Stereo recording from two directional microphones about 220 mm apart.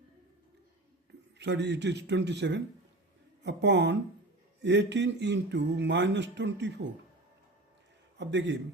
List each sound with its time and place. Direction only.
1.4 s speech: 50° right (ahead or behind)
8.2 s speech: 55° right (ahead or behind)